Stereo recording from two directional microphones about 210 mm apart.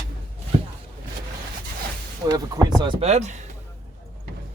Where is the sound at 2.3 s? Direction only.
20° right (ahead or behind); by 3.4 s 35° right (ahead or behind).